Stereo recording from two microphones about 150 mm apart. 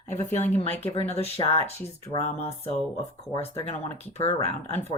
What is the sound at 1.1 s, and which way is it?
A woman's voice, 45° left (ahead or behind).